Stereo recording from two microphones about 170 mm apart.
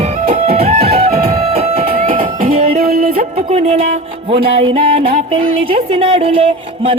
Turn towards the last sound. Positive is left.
turn(degrees=-35)  # may be behind; listen again after turning